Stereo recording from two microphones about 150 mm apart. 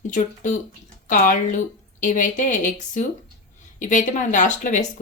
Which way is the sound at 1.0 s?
60° left (ahead or behind).